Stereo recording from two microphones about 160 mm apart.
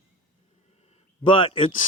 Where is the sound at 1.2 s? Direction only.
30° left (ahead or behind).